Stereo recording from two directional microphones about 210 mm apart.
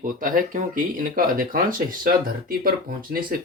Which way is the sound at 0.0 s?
40° right (ahead or behind).